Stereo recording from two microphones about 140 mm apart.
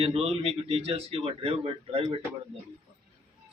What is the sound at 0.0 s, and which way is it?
Speech, 45° right (ahead or behind).